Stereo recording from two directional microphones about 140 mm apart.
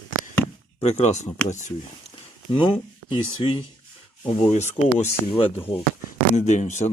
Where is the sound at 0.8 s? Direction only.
55° left (ahead or behind).